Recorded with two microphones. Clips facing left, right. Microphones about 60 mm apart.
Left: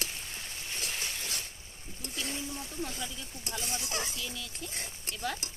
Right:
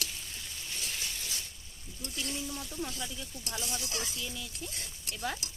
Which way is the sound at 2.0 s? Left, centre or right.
Left.